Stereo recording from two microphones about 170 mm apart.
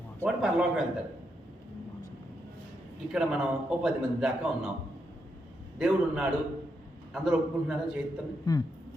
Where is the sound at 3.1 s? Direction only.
5° right (ahead or behind).